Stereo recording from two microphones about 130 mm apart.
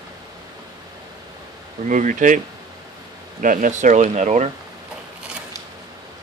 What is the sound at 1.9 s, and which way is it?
Speech, 80° right.